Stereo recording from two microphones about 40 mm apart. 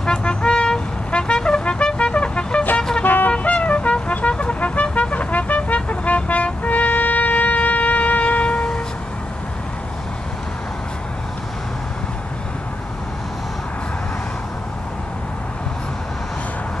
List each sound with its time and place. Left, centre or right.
0.2 s vehicle: left
3.0 s music: left
4.3 s vehicle: left
5.8 s music: left